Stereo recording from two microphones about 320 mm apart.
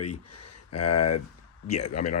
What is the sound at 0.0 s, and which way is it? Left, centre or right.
Speech, left.